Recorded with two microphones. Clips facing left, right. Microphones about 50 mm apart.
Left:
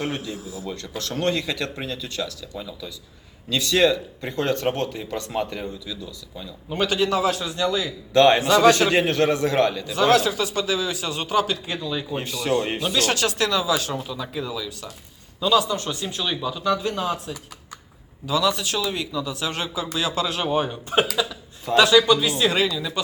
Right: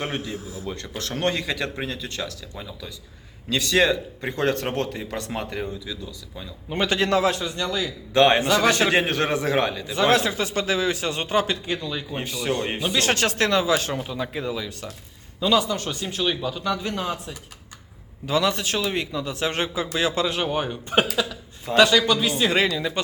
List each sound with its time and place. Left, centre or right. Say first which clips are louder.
0.0 s speech: left 1 dB; right
3.5 s speech: left 1 dB; right
4.8 s a man's voice: even; right
5.4 s speech: left 2 dB; centre
6.7 s a man's voice: even; right
7.8 s speech: even; right
9.4 s speech: left 2 dB; centre
9.9 s a man's voice: even; right
12.2 s speech: left 2 dB; right
13.0 s a man's voice: right 1 dB; right
18.3 s a man's voice: even; right